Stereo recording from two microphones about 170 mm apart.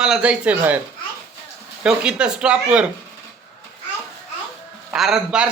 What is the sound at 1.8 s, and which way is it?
A man's voice, 5° right (ahead or behind).